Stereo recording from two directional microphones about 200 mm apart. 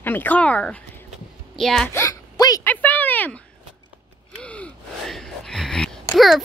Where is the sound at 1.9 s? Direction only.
15° left (ahead or behind).